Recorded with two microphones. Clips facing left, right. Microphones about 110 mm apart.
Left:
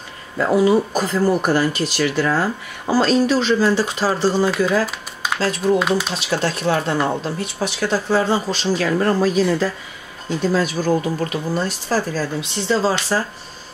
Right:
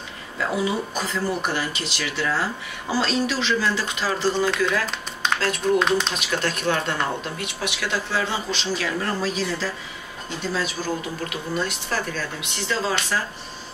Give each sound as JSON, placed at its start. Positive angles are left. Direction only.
{"t": 0.4, "sound": "speech", "side_deg": 45}
{"t": 5.8, "sound": "speech", "side_deg": 5}
{"t": 6.1, "sound": "speech", "side_deg": 30}